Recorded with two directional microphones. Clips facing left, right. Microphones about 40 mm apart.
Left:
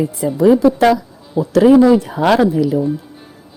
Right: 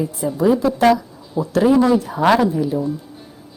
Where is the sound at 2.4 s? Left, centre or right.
Left.